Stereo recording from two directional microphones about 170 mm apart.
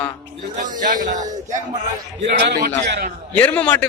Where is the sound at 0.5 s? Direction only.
50° right (ahead or behind).